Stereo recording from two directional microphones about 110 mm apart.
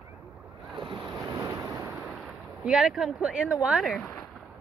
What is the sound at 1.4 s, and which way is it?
Waves, 25° right (ahead or behind).